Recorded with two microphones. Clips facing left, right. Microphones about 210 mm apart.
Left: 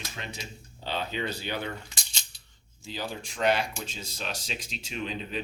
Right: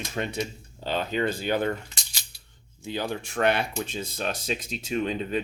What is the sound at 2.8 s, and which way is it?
Speech, 60° right (ahead or behind).